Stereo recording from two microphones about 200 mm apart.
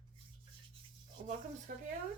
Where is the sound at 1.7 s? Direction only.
45° right (ahead or behind).